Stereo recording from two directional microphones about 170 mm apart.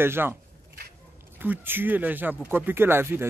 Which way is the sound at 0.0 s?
15° right (ahead or behind).